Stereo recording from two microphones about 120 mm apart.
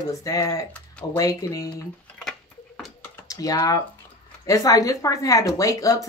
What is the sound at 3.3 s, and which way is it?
Speech, 30° left (ahead or behind).